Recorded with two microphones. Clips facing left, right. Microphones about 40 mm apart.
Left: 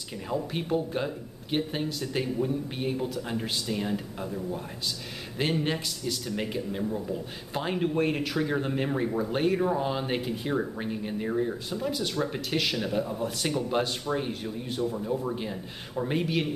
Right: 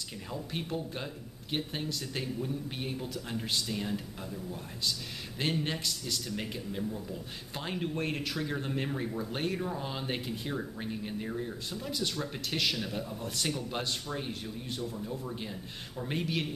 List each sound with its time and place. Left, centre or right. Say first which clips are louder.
0.5 s speech: left 4 dB; centre
5.4 s speech: left 5 dB; centre
6.8 s speech: left 5 dB; left
7.5 s speech: left 8 dB; centre
9.6 s speech: left 9 dB; left
9.8 s speech: left 7 dB; centre
10.5 s speech: left 9 dB; left
11.9 s speech: left 3 dB; centre
15.0 s speech: left 8 dB; left